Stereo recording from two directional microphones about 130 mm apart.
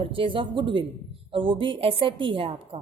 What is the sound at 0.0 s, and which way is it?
A woman's voice, 45° right (ahead or behind).